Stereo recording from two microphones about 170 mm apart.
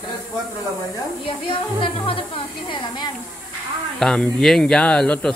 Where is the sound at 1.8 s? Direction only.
30° left (ahead or behind).